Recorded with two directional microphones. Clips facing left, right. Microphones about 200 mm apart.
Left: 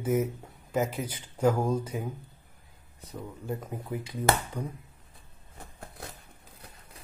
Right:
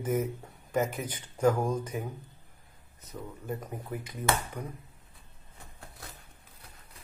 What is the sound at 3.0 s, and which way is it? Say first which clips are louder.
Speech: left 2 dB; 10° left (ahead or behind).